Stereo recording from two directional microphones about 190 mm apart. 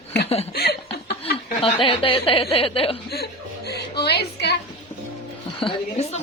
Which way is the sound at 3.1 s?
60° left (ahead or behind).